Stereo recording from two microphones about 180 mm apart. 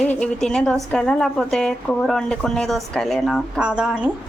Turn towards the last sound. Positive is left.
turn(degrees=-5)  # may be behind; listen again after turning